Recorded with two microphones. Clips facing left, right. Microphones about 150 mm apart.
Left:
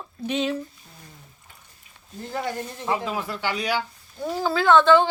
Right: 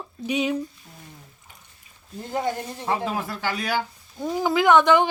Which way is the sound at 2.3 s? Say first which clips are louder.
Right 3 dB; 20° right (ahead or behind).